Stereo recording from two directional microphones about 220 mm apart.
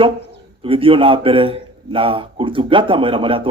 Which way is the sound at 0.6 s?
25° right (ahead or behind).